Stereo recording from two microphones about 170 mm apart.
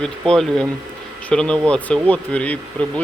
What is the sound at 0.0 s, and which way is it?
Speech, 5° left (ahead or behind).